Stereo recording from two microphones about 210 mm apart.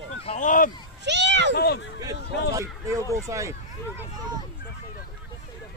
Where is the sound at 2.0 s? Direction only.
15° right (ahead or behind).